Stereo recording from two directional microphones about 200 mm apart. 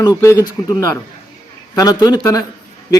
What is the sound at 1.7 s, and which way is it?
Speech, 20° left (ahead or behind).